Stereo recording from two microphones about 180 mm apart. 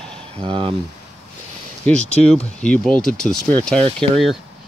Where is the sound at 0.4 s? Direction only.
30° right (ahead or behind).